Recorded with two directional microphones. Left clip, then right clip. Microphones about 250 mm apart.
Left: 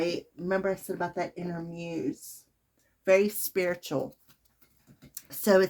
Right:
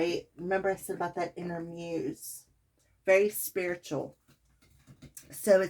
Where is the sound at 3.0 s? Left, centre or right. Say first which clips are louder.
Left 1 dB; left.